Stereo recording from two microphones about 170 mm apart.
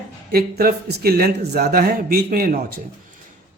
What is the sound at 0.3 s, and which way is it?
A man's voice, 65° right (ahead or behind).